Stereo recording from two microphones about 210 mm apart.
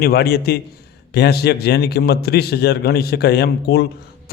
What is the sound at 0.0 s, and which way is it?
A man's voice, 45° left (ahead or behind).